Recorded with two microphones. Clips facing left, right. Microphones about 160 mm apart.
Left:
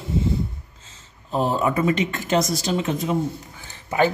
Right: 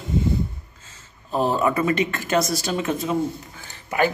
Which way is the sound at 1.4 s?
20° left (ahead or behind).